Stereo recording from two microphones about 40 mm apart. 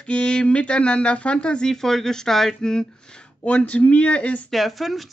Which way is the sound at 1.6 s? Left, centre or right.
Centre.